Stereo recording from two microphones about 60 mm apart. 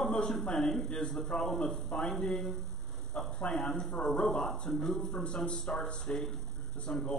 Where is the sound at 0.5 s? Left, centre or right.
Centre.